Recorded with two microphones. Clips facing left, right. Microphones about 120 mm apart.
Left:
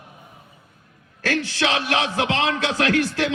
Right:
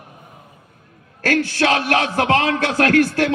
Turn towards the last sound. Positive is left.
turn(degrees=-45)  # may be behind; listen again after turning